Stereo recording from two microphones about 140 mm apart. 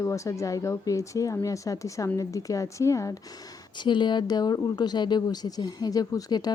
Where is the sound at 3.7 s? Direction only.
35° left (ahead or behind).